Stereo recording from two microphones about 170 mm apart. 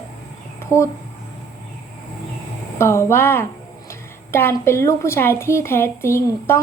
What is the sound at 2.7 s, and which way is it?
Speech, 15° left (ahead or behind).